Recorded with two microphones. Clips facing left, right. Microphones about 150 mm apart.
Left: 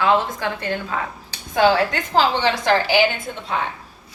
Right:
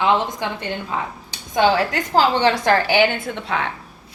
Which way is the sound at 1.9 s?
45° right (ahead or behind).